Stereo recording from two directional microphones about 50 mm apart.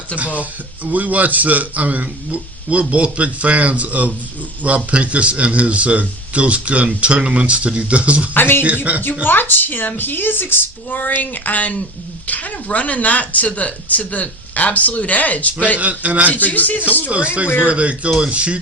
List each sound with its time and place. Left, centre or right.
0.1 s speech: centre
0.9 s a man's voice: right
8.3 s a woman's voice: left
8.6 s a man's voice: right
9.2 s a woman's voice: left
15.8 s a man's voice: right
16.3 s speech: left
17.7 s a man's voice: right